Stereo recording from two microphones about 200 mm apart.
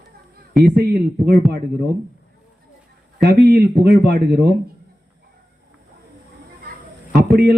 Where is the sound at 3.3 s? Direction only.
50° right (ahead or behind).